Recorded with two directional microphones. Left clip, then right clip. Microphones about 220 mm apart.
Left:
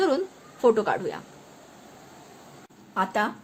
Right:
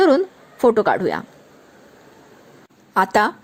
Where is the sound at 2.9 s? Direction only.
45° right (ahead or behind).